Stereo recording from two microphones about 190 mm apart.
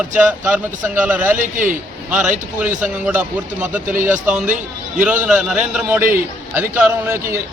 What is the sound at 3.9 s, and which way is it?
A man's voice, 45° right (ahead or behind).